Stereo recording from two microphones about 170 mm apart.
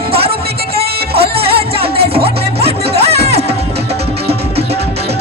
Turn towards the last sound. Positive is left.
turn(degrees=-35)  # may be behind; listen again after turning